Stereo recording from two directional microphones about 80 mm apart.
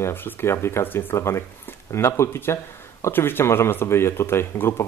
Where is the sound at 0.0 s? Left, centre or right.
Left.